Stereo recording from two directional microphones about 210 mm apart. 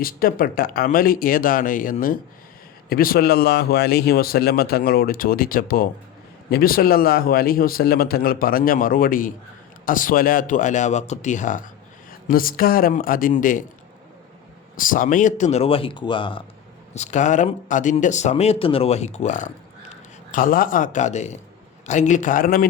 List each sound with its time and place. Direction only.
0.0 s speech: 45° left (ahead or behind)
14.8 s speech: 40° left (ahead or behind); by 16.4 s 25° left (ahead or behind)
16.9 s speech: 35° left (ahead or behind)